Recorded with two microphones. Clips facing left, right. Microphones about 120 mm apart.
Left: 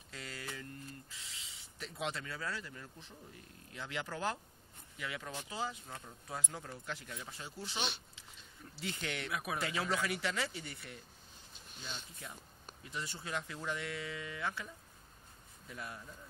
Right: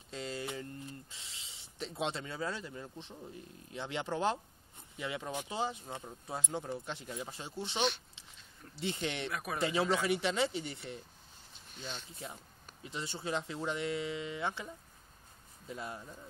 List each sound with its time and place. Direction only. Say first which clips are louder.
0.1 s speech: right 7 dB; 25° right (ahead or behind)
9.3 s speech: even; centre (ahead or behind)
9.6 s speech: right 7 dB; 25° right (ahead or behind)